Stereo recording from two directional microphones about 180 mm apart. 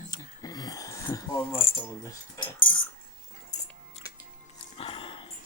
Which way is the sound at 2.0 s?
25° left (ahead or behind).